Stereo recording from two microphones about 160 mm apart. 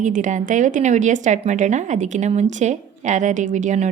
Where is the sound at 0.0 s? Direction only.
50° right (ahead or behind).